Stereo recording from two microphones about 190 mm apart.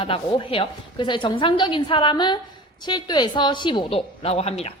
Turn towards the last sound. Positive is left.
turn(degrees=35)  # may be behind; listen again after turning